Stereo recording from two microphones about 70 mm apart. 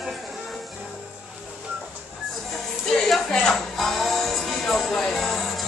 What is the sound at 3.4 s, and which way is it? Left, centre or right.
Music, centre.